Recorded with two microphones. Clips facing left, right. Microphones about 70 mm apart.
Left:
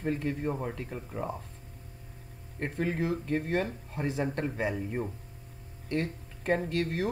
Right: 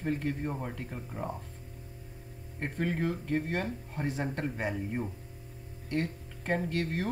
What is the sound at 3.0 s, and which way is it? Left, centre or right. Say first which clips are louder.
Speech: left 1 dB; left.